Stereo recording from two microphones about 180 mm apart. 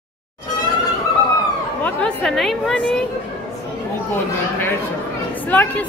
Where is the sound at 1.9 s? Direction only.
5° left (ahead or behind).